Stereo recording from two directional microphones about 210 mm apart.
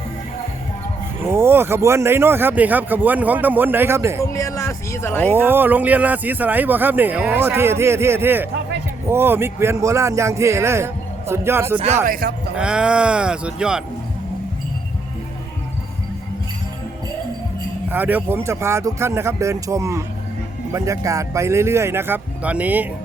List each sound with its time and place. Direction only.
1.2 s speech: 10° right (ahead or behind)
4.3 s speech: 15° left (ahead or behind)
5.3 s speech: 10° right (ahead or behind)
12.0 s speech: 45° right (ahead or behind)
12.5 s speech: 5° right (ahead or behind)
17.9 s speech: 10° right (ahead or behind)